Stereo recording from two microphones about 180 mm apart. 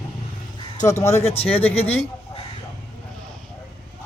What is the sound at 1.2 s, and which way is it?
Speech, 30° left (ahead or behind).